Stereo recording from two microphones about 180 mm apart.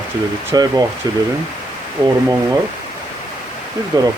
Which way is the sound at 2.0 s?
15° right (ahead or behind).